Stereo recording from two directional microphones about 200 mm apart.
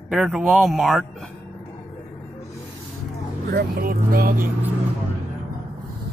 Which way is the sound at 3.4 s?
50° right (ahead or behind).